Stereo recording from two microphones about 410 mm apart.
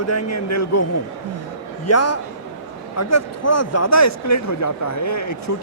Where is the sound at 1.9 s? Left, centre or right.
Left.